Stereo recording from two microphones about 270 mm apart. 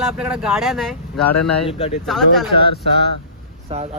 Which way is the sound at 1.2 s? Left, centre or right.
Left.